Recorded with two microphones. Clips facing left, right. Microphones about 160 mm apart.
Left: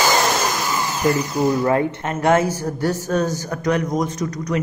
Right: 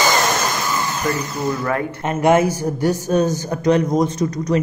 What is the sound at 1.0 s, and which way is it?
Speech, 15° left (ahead or behind).